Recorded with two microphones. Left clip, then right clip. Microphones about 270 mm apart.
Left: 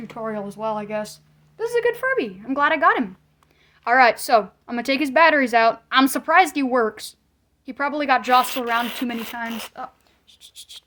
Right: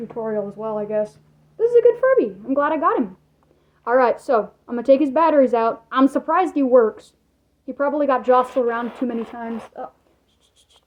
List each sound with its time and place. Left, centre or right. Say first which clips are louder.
0.5 s speech: right 2 dB; left